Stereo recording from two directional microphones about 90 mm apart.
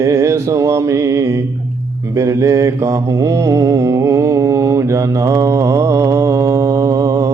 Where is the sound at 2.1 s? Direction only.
35° right (ahead or behind).